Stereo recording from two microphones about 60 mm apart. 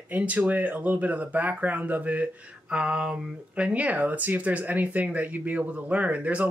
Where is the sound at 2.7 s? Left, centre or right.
Centre.